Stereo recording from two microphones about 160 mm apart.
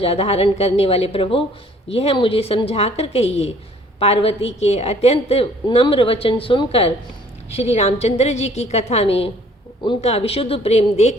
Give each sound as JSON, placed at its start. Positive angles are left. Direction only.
{"t": 0.0, "sound": "a woman's voice", "side_deg": 40}